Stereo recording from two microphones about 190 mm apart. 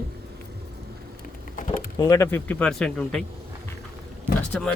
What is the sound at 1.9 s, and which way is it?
Speech, 20° left (ahead or behind).